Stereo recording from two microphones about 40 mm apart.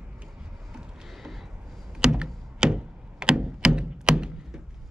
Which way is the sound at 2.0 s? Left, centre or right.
Centre.